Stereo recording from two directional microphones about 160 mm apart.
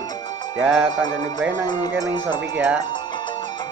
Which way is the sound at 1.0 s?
25° left (ahead or behind).